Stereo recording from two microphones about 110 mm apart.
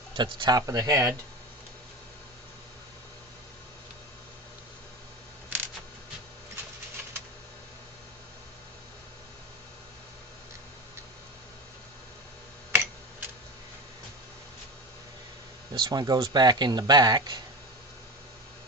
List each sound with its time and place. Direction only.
0.1 s speech: 45° right (ahead or behind)
0.6 s speech: 30° right (ahead or behind)
5.5 s a sound: 20° right (ahead or behind)
12.7 s tick-tock: 20° right (ahead or behind)
15.7 s speech: 45° right (ahead or behind)